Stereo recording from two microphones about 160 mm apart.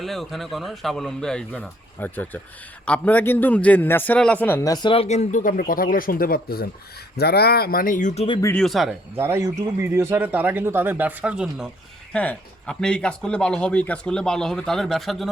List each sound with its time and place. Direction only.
0.0 s a man's voice: centre (ahead or behind)
4.6 s speech: 25° left (ahead or behind); by 6.7 s 70° left (ahead or behind)
7.2 s speech: 85° left; by 8.4 s 40° left (ahead or behind)
8.5 s a man's voice: centre (ahead or behind)
9.1 s speech: 15° right (ahead or behind)
12.1 s a man's voice: 10° left (ahead or behind)